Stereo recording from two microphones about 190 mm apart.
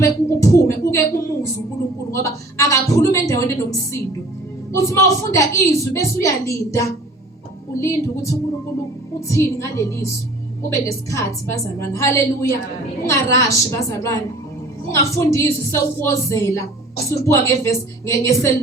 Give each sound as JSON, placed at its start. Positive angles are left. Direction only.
{"t": 0.0, "sound": "music", "side_deg": 15}
{"t": 2.2, "sound": "a woman's voice", "side_deg": 15}
{"t": 4.8, "sound": "a woman's voice", "side_deg": 15}